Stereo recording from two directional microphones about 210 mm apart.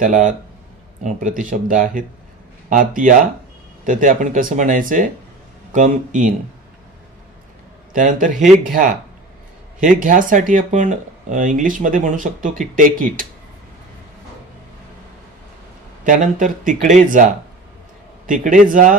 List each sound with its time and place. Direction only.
0.0 s speech: 40° right (ahead or behind)
7.9 s speech: 40° right (ahead or behind)
9.8 s speech: 40° right (ahead or behind)
16.0 s speech: 40° right (ahead or behind)